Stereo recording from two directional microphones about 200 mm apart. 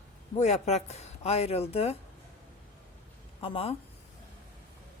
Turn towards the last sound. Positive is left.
turn(degrees=25)  # may be behind; listen again after turning